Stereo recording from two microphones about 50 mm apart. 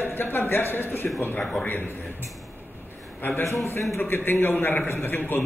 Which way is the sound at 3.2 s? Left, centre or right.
Left.